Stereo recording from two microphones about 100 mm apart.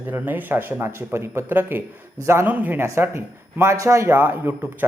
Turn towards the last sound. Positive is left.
turn(degrees=-20)  # may be behind; listen again after turning